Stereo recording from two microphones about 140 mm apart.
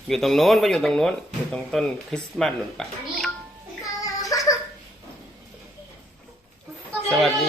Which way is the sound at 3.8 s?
25° left (ahead or behind).